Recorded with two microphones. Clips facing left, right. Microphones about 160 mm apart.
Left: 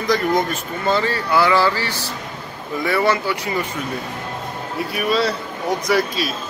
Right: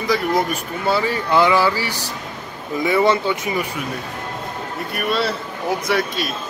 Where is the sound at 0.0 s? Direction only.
5° right (ahead or behind); by 3.6 s 20° right (ahead or behind).